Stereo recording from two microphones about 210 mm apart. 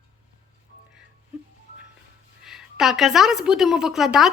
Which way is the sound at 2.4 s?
Centre (ahead or behind).